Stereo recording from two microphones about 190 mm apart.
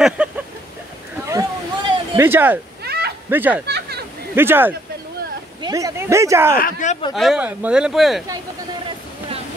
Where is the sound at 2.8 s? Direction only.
55° right (ahead or behind).